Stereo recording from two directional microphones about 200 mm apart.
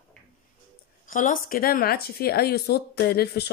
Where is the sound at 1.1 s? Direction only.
40° left (ahead or behind).